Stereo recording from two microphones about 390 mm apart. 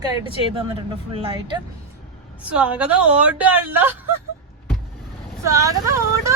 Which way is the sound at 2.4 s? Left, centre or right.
Centre.